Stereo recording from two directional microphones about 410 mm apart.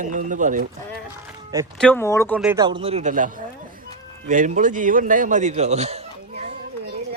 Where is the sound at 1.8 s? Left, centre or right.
Centre.